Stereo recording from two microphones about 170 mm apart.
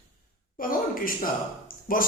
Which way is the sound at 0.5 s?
55° left (ahead or behind).